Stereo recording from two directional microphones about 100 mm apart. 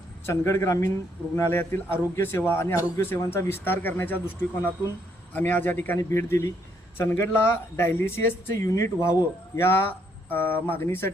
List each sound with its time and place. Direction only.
0.3 s speech: 30° left (ahead or behind)